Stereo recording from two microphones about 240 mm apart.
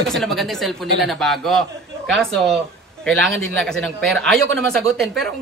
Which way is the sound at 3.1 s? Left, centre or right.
Centre.